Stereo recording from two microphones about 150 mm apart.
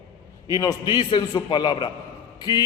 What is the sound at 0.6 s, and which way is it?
A man's voice, 25° left (ahead or behind).